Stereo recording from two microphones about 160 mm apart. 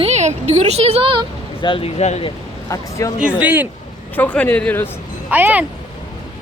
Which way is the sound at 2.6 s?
20° left (ahead or behind).